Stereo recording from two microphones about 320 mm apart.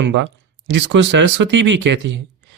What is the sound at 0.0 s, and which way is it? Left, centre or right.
Speech, right.